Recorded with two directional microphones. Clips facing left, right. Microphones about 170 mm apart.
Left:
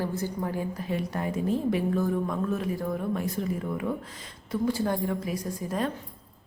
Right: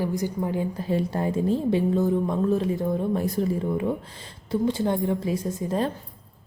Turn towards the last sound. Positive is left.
turn(degrees=-25)  # may be behind; listen again after turning